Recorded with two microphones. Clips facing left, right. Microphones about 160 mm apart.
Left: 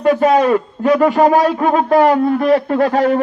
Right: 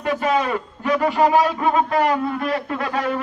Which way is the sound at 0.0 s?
45° left (ahead or behind).